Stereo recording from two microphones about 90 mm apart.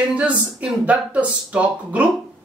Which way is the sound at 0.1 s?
15° right (ahead or behind).